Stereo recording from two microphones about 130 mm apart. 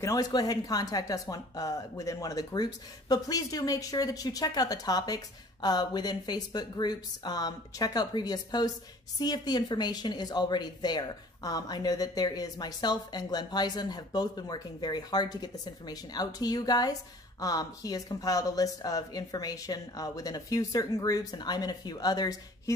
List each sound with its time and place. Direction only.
0.0 s a woman's voice: 25° left (ahead or behind)